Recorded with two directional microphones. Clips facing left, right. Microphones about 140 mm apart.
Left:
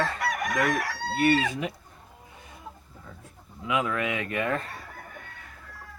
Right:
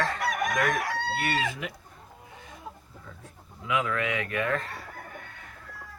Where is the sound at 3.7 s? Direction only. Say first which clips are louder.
Left 1 dB; 25° left (ahead or behind).